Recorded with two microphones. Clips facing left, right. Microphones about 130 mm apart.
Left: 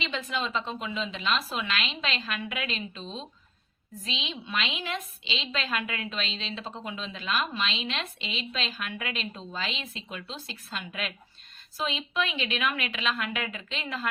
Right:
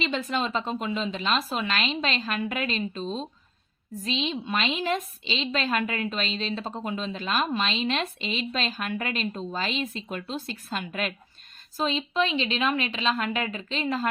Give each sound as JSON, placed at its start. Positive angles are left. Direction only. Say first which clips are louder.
{"t": 0.0, "sound": "a woman's voice", "louder": "right 4 dB", "side_deg": -40}